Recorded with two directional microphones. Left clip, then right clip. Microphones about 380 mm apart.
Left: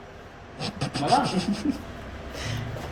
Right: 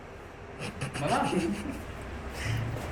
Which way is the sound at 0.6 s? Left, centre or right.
Left.